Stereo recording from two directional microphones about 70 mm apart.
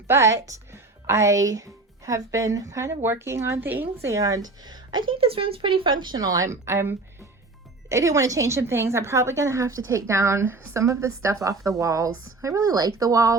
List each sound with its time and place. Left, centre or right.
0.1 s speech: right
3.6 s a woman's voice: right
4.0 s speech: right
6.0 s a woman's voice: right